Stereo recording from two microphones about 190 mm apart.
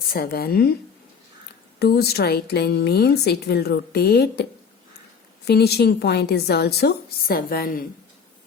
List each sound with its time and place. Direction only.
0.1 s a woman's voice: 50° left (ahead or behind)
1.8 s a woman's voice: 55° left (ahead or behind)
5.5 s a woman's voice: 60° left (ahead or behind)